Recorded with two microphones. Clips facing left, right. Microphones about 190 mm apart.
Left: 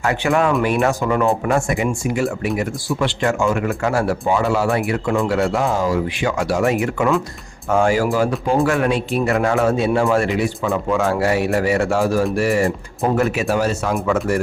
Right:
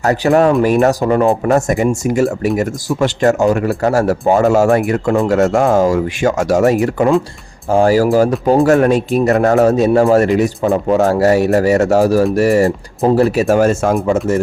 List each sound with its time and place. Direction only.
0.0 s speech: 40° right (ahead or behind)
14.1 s speech: 20° right (ahead or behind)